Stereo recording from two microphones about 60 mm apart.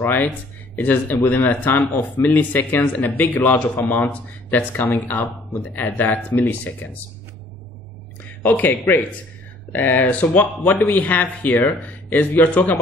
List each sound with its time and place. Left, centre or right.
0.0 s speech: left
4.1 s speech: left
8.3 s a sound: left
9.7 s speech: left